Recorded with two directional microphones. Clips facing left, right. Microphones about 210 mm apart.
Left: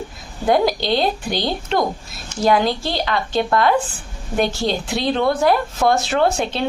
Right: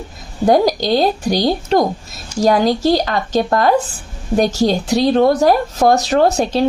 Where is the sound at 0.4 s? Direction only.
40° right (ahead or behind).